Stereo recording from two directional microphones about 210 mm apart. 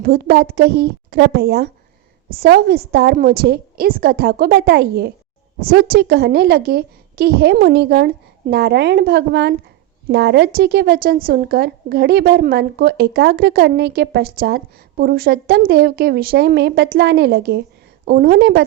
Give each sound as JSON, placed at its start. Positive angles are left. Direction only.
{"t": 0.0, "sound": "a woman's voice", "side_deg": -45}